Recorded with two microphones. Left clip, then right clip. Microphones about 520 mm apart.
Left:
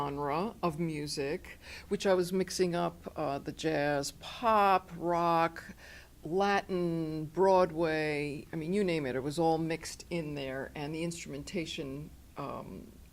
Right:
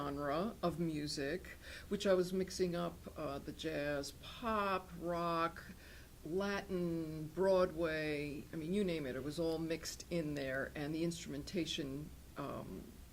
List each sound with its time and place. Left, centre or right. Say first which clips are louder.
0.1 s speech: left 5 dB; left
10.1 s speech: left 3 dB; left